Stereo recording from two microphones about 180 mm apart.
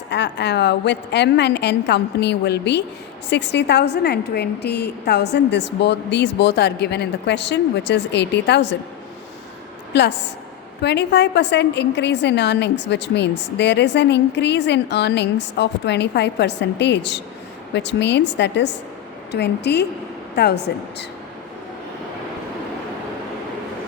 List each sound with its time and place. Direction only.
0.1 s a woman's voice: 70° left (ahead or behind)
9.9 s a woman's voice: 70° left (ahead or behind)